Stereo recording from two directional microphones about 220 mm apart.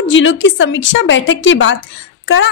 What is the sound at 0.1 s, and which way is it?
A woman's voice, 60° left (ahead or behind).